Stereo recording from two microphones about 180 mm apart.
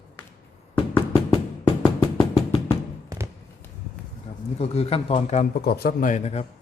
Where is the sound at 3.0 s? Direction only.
20° right (ahead or behind).